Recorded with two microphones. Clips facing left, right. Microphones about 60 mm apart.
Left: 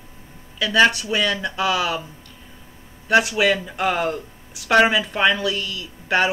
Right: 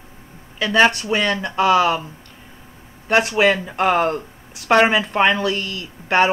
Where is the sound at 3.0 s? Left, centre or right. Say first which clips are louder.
Right 1 dB; right.